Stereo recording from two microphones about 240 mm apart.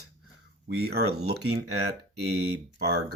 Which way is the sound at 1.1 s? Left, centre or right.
Right.